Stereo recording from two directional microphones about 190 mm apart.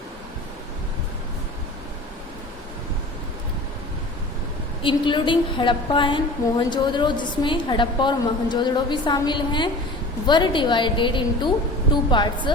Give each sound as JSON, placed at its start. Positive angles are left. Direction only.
{"t": 4.8, "sound": "a woman's voice", "side_deg": 25}